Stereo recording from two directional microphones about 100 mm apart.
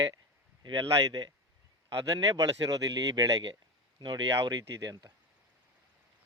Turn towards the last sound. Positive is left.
turn(degrees=-40)  # may be behind; listen again after turning